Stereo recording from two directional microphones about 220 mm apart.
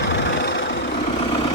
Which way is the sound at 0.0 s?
50° left (ahead or behind).